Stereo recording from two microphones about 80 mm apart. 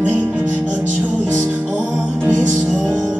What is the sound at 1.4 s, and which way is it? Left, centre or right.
Music, centre.